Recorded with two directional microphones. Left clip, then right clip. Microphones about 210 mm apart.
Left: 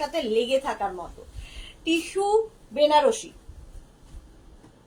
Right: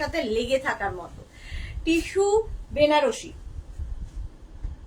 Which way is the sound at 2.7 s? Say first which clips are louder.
Left 1 dB; 15° right (ahead or behind).